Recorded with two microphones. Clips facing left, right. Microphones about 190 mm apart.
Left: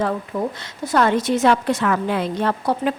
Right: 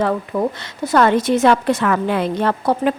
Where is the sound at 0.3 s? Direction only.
65° right (ahead or behind).